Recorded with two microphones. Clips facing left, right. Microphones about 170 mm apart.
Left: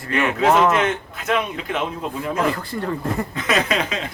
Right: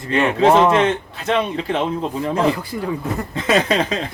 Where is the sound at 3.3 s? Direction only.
30° right (ahead or behind).